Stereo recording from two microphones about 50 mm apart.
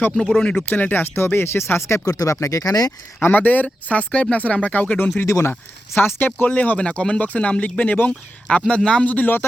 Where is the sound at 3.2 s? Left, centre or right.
Left.